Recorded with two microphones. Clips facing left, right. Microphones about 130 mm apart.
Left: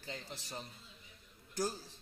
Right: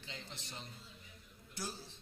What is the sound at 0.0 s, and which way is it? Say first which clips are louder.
A man's voice: left 4 dB; 40° left (ahead or behind).